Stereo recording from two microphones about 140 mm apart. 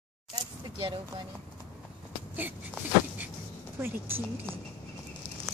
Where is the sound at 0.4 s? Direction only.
30° right (ahead or behind).